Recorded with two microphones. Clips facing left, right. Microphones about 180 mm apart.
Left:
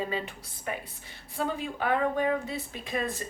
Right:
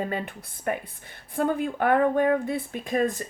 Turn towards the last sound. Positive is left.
turn(degrees=-45)  # may be behind; listen again after turning